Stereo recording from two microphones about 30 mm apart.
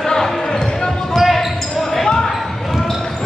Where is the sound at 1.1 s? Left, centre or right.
Centre.